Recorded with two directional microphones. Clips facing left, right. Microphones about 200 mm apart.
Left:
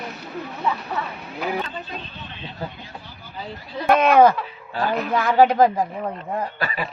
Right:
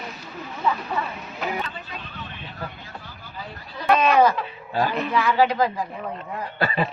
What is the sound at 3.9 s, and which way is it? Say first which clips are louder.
Speech: left 3 dB; 55° left (ahead or behind).